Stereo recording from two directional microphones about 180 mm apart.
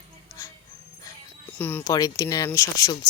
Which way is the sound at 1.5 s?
10° left (ahead or behind).